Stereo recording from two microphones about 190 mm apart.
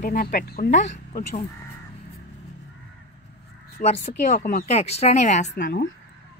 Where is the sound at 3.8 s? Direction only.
50° left (ahead or behind).